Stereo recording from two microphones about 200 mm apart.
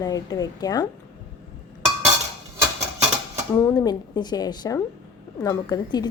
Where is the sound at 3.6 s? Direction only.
20° left (ahead or behind).